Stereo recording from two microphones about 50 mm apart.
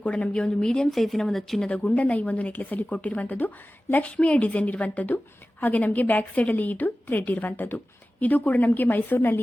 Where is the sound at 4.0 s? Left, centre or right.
Left.